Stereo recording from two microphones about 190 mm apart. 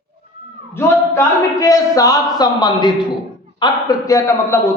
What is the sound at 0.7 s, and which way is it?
A man's voice, 15° left (ahead or behind).